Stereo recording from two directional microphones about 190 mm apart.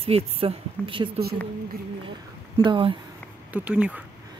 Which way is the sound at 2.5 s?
25° right (ahead or behind).